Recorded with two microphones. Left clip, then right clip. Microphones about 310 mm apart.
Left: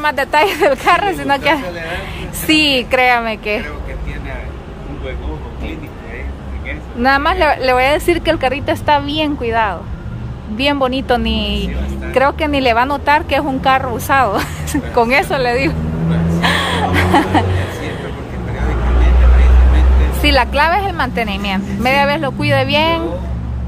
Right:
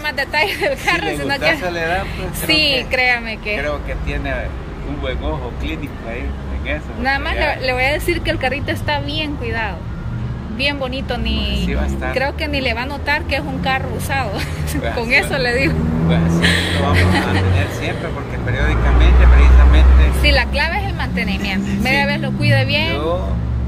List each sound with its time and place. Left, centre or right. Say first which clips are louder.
0.0 s a woman's voice: left 5 dB; centre
7.0 s a woman's voice: left 7 dB; centre
20.2 s a woman's voice: left 4 dB; centre